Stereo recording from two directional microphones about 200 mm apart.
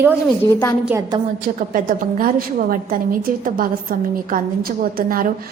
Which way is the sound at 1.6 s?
45° right (ahead or behind).